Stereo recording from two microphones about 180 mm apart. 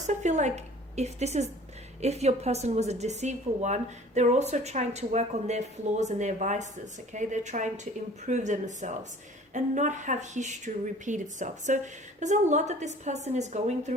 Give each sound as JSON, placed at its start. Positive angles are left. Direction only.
{"t": 0.0, "sound": "a woman's voice", "side_deg": -40}